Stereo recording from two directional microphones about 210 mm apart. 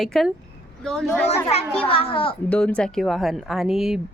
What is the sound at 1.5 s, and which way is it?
Speech, 30° left (ahead or behind).